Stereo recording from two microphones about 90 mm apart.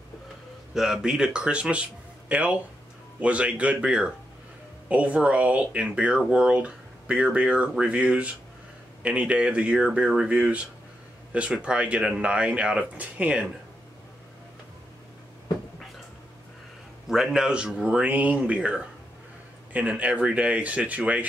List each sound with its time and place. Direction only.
0.7 s speech: 5° right (ahead or behind)
17.1 s speech: 5° right (ahead or behind)